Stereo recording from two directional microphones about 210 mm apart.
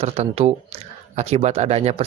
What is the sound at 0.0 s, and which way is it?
Speech, 30° right (ahead or behind).